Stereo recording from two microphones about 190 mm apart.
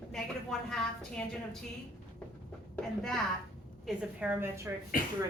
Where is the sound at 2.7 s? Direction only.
Centre (ahead or behind); by 4.7 s 15° right (ahead or behind).